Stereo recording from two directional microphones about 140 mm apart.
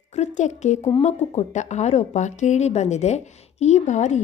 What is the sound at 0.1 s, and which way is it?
A woman's voice, 55° left (ahead or behind).